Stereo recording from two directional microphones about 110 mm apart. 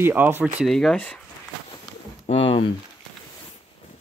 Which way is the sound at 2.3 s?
50° left (ahead or behind).